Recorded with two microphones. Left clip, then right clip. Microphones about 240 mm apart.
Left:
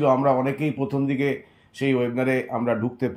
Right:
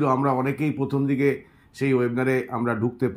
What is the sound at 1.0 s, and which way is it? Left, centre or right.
Speech, right.